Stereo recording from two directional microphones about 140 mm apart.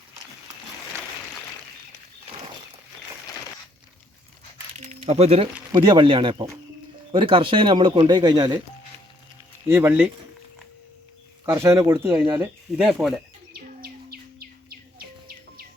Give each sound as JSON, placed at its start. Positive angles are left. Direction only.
{"t": 4.9, "sound": "speech", "side_deg": -50}
{"t": 5.7, "sound": "speech", "side_deg": -35}
{"t": 9.6, "sound": "speech", "side_deg": -15}
{"t": 11.4, "sound": "speech", "side_deg": -20}
{"t": 13.5, "sound": "bird", "side_deg": -90}